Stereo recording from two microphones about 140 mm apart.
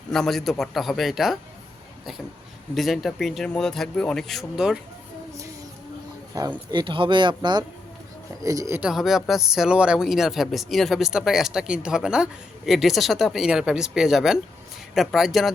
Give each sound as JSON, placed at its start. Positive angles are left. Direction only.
{"t": 0.1, "sound": "speech", "side_deg": 5}
{"t": 2.7, "sound": "speech", "side_deg": 0}
{"t": 6.7, "sound": "speech", "side_deg": -35}
{"t": 8.4, "sound": "speech", "side_deg": -20}
{"t": 8.8, "sound": "speech", "side_deg": -5}